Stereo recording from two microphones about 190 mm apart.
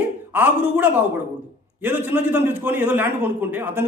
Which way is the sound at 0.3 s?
10° right (ahead or behind).